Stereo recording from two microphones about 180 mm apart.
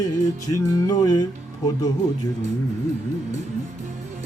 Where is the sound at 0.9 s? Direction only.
20° left (ahead or behind).